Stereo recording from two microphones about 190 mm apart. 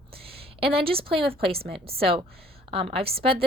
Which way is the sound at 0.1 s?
30° right (ahead or behind).